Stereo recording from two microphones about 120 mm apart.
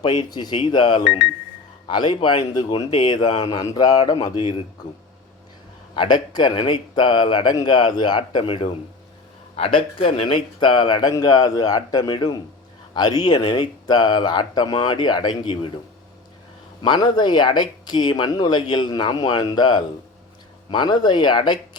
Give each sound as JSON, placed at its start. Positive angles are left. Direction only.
{"t": 0.0, "sound": "speech", "side_deg": 40}
{"t": 6.0, "sound": "speech", "side_deg": 40}
{"t": 16.8, "sound": "speech", "side_deg": 40}